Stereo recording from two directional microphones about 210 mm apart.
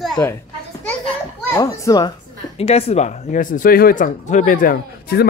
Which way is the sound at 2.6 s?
30° left (ahead or behind).